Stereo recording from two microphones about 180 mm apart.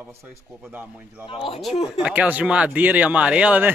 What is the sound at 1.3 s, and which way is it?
Speech, 30° left (ahead or behind).